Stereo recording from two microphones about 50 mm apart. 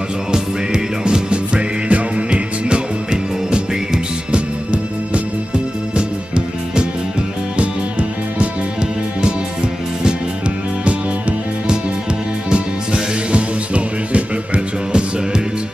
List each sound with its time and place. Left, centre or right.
0.3 s music: centre
12.4 s music: centre